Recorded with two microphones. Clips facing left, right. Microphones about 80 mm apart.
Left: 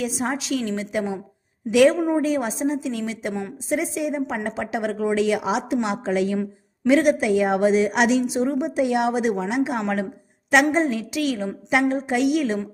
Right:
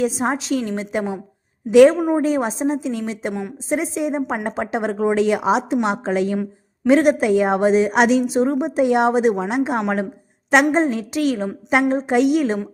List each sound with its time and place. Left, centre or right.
0.0 s a woman's voice: right